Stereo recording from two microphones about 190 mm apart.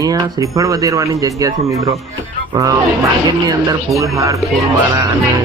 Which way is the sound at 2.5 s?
15° right (ahead or behind).